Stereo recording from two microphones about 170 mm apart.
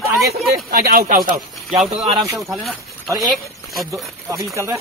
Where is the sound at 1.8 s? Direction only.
Centre (ahead or behind).